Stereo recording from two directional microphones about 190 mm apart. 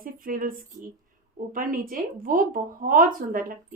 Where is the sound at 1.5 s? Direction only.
45° right (ahead or behind).